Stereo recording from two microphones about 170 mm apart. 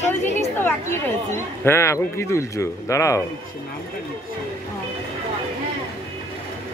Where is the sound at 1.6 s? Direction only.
15° left (ahead or behind).